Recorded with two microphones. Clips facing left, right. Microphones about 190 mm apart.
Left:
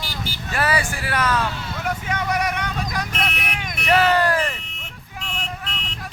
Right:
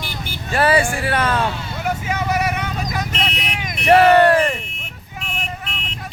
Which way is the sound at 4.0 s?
65° right (ahead or behind).